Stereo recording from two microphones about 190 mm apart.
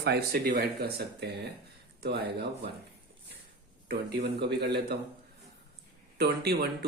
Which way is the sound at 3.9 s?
55° right (ahead or behind).